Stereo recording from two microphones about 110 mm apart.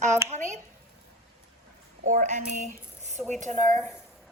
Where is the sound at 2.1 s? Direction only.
90° right.